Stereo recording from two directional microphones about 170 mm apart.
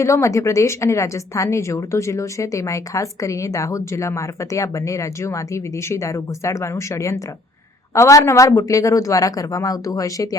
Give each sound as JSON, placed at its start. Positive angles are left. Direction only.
{"t": 0.0, "sound": "a woman's voice", "side_deg": 15}